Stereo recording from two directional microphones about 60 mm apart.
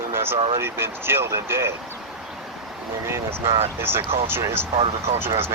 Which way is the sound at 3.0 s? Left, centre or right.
Right.